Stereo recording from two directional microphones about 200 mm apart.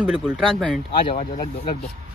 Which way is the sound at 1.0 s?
25° left (ahead or behind).